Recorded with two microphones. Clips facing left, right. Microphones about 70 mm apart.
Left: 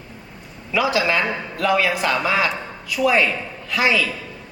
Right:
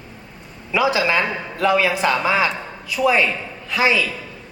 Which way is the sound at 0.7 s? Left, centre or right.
Right.